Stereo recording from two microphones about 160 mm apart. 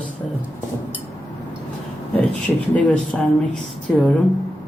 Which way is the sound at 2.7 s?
5° left (ahead or behind).